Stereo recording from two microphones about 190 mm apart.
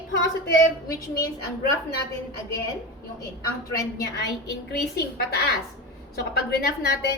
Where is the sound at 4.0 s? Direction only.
60° left (ahead or behind).